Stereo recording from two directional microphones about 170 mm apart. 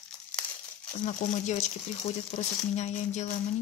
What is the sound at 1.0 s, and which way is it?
Speech, 45° left (ahead or behind).